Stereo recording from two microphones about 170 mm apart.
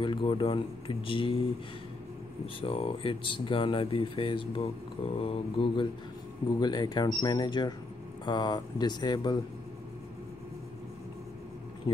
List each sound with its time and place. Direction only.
0.0 s speech: 30° left (ahead or behind)
2.4 s speech: 35° left (ahead or behind)